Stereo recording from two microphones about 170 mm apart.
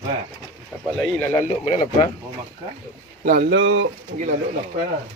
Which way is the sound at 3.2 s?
55° right (ahead or behind).